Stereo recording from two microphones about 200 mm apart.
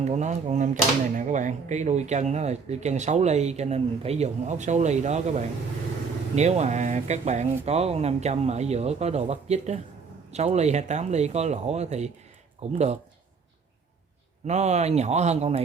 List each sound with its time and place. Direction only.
0.0 s speech: 35° right (ahead or behind)
14.4 s speech: 35° right (ahead or behind)